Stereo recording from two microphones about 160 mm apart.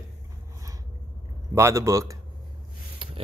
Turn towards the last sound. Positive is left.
turn(degrees=-30)  # may be behind; listen again after turning